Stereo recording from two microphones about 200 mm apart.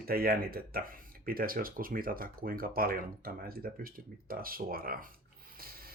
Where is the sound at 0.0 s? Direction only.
50° right (ahead or behind).